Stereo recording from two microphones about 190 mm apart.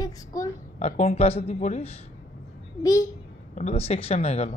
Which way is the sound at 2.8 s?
15° left (ahead or behind).